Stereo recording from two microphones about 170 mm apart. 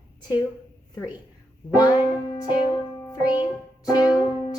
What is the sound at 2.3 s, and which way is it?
Music, 25° left (ahead or behind).